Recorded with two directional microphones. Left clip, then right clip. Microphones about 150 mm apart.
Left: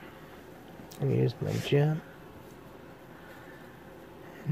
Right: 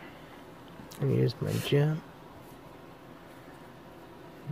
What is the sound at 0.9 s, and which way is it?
Speech, centre (ahead or behind).